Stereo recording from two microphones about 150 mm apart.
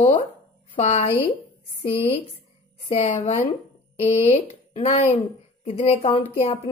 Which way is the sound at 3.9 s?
45° left (ahead or behind).